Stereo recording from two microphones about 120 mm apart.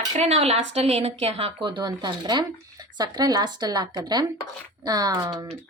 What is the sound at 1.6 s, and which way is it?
Speech, 40° right (ahead or behind).